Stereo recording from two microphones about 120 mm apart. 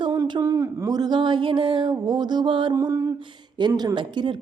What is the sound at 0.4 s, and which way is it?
Speech, 25° right (ahead or behind).